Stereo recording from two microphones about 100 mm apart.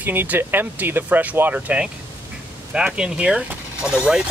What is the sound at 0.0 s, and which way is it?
Speech, 20° right (ahead or behind).